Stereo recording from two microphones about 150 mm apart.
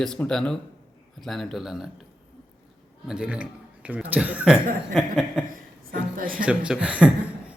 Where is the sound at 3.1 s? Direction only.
5° right (ahead or behind).